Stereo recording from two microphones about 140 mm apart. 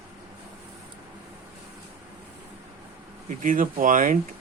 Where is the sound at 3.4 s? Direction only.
70° right (ahead or behind).